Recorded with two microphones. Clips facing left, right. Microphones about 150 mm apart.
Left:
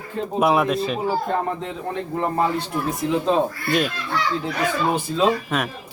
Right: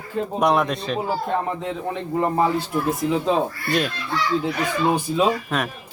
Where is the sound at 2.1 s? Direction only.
5° right (ahead or behind).